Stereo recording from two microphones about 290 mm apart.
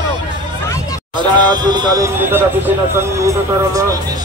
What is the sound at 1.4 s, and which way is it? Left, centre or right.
Speech, centre.